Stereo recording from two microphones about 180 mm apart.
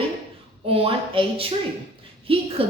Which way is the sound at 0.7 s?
30° right (ahead or behind).